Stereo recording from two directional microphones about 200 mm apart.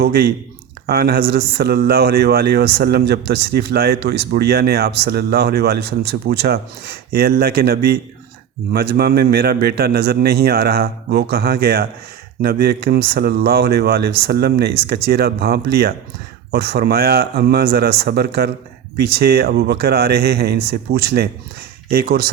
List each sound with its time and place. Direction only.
0.0 s a man's voice: 50° right (ahead or behind)